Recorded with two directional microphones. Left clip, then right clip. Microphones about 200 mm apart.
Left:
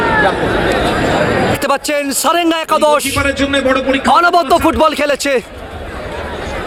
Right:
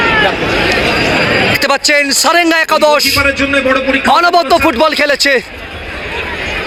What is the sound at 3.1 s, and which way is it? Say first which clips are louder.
Speech: right 3 dB; 25° right (ahead or behind).